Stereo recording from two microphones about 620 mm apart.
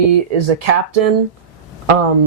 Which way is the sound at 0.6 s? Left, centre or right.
Right.